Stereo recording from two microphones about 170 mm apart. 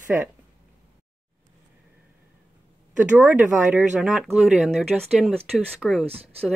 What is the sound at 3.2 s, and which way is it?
Speech, 10° right (ahead or behind).